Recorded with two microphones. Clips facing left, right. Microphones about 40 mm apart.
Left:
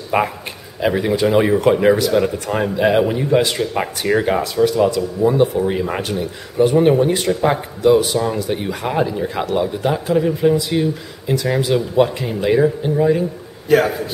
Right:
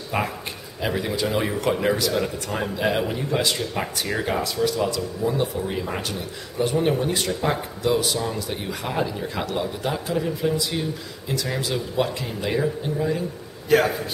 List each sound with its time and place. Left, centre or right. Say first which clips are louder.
0.1 s speech: left 8 dB; centre
13.7 s a man's voice: left 4 dB; centre